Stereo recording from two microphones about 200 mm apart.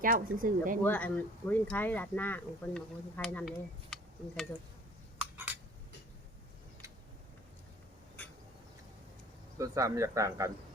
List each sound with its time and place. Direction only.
0.0 s speech: 45° right (ahead or behind)
0.9 s speech: 10° left (ahead or behind)
3.8 s a sound: centre (ahead or behind)
9.6 s speech: 15° right (ahead or behind)